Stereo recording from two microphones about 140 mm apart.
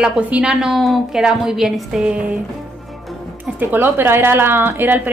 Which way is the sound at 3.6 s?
15° right (ahead or behind).